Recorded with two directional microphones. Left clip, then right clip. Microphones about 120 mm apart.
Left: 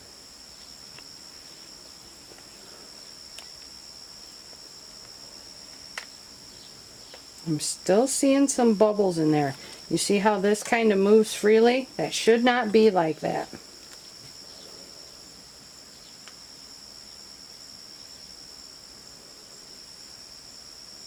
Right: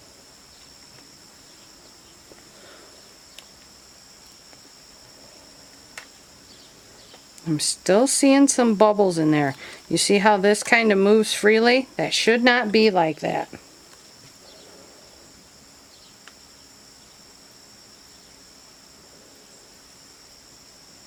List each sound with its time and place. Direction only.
7.4 s speech: 45° right (ahead or behind)